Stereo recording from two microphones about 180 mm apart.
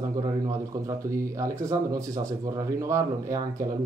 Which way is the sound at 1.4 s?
20° right (ahead or behind).